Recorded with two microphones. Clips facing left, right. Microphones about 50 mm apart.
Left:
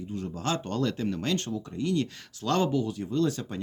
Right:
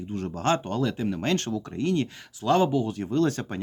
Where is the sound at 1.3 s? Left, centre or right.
Right.